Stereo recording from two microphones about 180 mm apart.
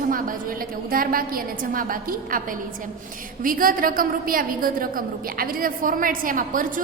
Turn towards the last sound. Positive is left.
turn(degrees=-50)  # may be behind; listen again after turning